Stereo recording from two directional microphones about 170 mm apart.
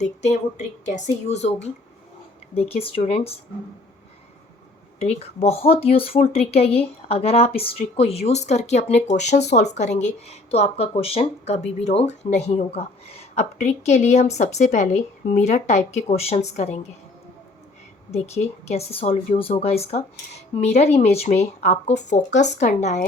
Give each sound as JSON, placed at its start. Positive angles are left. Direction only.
{"t": 0.9, "sound": "speech", "side_deg": 40}
{"t": 2.6, "sound": "speech", "side_deg": 35}
{"t": 4.9, "sound": "speech", "side_deg": 40}
{"t": 18.6, "sound": "speech", "side_deg": 40}